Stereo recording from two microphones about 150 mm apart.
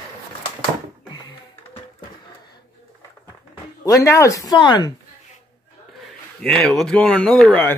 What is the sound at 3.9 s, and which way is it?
Speech, 20° left (ahead or behind).